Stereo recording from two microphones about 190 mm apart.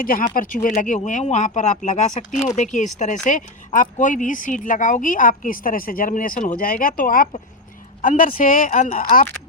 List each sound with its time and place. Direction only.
0.0 s speech: 50° left (ahead or behind)